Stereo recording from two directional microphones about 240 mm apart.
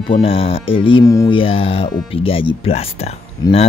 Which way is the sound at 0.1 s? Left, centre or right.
Left.